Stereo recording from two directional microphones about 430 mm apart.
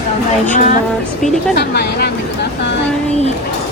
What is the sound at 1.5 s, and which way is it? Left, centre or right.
Speech, left.